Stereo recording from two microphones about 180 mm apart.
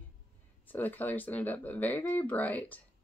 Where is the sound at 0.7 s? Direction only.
10° left (ahead or behind).